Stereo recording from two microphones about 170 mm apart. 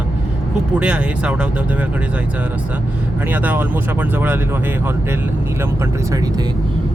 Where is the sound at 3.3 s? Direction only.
10° right (ahead or behind).